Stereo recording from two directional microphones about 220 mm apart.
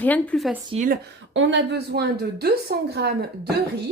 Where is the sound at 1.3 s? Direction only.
55° right (ahead or behind).